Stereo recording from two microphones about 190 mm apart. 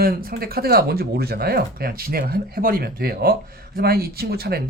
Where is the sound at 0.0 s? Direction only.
50° right (ahead or behind).